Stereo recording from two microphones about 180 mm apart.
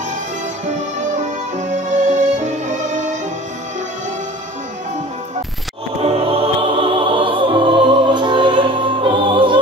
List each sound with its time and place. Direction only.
1.9 s music: 40° right (ahead or behind)
6.0 s music: 30° right (ahead or behind)